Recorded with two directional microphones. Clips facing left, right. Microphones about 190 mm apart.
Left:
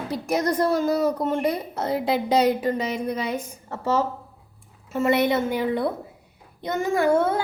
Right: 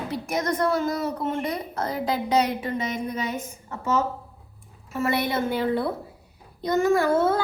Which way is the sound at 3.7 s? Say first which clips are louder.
Left 2 dB; 35° left (ahead or behind).